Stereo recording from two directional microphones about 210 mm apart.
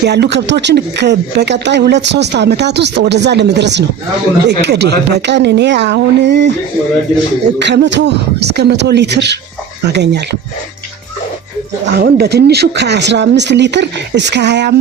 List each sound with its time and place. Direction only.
0.0 s speech: 50° right (ahead or behind)
7.6 s speech: 55° right (ahead or behind)
11.9 s speech: 50° right (ahead or behind)